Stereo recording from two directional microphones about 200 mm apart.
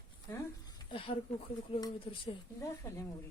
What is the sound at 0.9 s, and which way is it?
Speech, 25° left (ahead or behind).